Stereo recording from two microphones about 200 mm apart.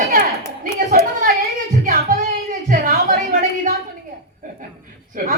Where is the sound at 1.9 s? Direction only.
45° right (ahead or behind).